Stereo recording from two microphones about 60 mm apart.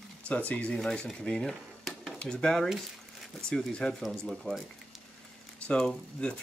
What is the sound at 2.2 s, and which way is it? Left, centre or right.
Speech, centre.